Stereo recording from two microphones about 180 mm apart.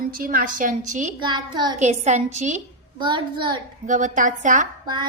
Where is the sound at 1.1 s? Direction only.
25° right (ahead or behind).